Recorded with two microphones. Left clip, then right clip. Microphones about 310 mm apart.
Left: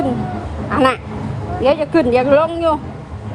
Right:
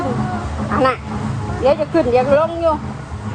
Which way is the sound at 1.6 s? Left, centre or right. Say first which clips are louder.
Left 1 dB; left.